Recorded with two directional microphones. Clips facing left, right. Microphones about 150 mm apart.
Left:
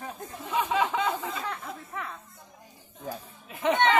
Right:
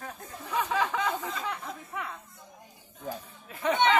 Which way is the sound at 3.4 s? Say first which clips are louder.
Left 1 dB; 20° left (ahead or behind).